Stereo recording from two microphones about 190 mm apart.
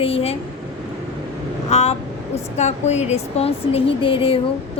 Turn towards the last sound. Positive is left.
turn(degrees=30)  # may be behind; listen again after turning